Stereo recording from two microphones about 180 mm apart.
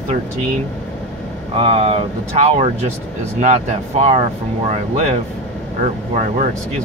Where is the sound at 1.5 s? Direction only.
30° right (ahead or behind).